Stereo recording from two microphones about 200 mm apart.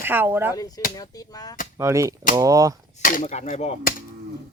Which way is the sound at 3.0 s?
40° left (ahead or behind).